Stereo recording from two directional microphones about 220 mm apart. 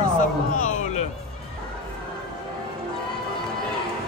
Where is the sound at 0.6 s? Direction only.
35° left (ahead or behind).